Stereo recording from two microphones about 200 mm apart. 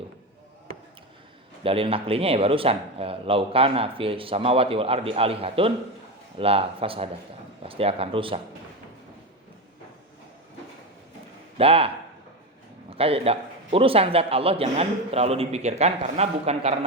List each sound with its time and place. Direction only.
1.6 s a man's voice: 30° right (ahead or behind)
11.5 s speech: 30° right (ahead or behind)
12.9 s a man's voice: 30° right (ahead or behind)